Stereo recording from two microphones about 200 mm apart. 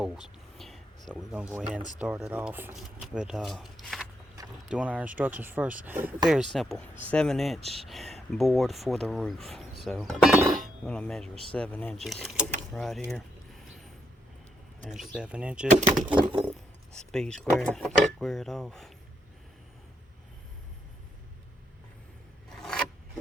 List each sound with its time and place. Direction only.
0.0 s whispering: centre (ahead or behind)
1.1 s speech: 5° right (ahead or behind)
14.8 s speech: centre (ahead or behind)
22.4 s scissors: 5° left (ahead or behind)